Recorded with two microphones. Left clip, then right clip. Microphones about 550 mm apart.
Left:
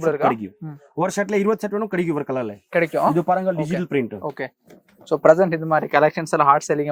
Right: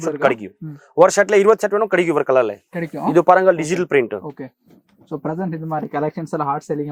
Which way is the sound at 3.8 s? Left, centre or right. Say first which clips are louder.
Right 8 dB; right.